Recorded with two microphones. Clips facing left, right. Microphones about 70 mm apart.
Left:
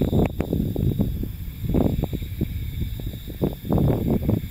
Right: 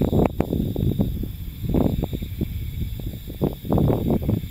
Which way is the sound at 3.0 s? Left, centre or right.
Right.